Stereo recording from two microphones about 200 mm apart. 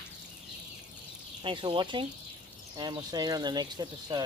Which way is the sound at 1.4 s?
25° right (ahead or behind).